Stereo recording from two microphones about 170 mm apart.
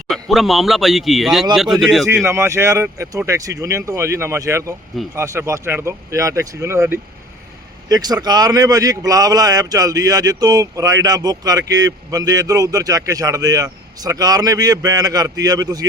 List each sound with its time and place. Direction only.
0.1 s speech: centre (ahead or behind)
2.2 s speech: 15° right (ahead or behind)